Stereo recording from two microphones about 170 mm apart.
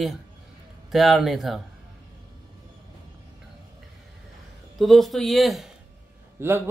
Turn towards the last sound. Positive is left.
turn(degrees=-15)  # may be behind; listen again after turning